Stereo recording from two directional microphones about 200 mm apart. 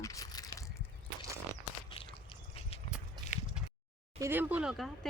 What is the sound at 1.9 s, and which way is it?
Dog, 25° left (ahead or behind).